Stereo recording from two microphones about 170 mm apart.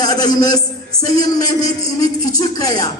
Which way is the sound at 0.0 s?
20° left (ahead or behind).